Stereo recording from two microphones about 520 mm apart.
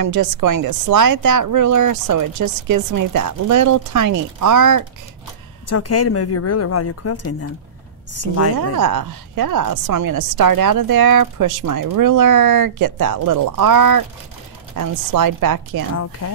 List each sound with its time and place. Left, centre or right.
0.0 s a woman's voice: right
5.7 s a woman's voice: left
8.5 s a woman's voice: right
16.2 s speech: left